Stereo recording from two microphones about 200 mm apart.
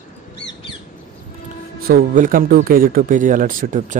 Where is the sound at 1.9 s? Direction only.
45° right (ahead or behind).